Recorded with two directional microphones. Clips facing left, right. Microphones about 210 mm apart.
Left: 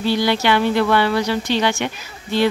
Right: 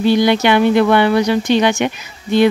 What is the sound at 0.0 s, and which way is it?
Speech, 15° right (ahead or behind).